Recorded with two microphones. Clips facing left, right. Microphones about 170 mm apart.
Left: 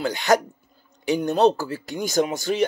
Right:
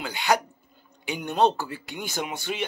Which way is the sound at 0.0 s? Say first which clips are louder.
Left 5 dB; 40° left (ahead or behind).